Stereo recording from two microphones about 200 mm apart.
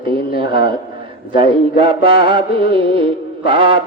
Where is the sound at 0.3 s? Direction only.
25° right (ahead or behind).